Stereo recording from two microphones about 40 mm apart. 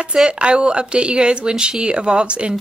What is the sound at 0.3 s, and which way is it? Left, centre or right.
Speech, right.